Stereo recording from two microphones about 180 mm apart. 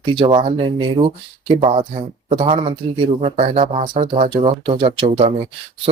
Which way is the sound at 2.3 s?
30° right (ahead or behind).